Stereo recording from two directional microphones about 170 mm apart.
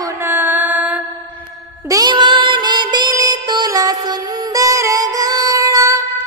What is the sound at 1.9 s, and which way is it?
Music, 25° right (ahead or behind).